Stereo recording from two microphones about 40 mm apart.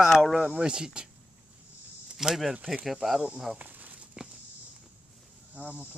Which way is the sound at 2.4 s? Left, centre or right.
Centre.